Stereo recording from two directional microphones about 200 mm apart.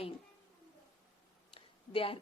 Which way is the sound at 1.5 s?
25° left (ahead or behind).